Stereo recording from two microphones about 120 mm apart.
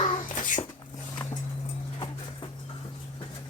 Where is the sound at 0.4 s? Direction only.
90° left.